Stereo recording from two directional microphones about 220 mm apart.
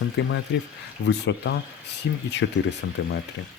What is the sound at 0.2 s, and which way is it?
Speech, 55° left (ahead or behind).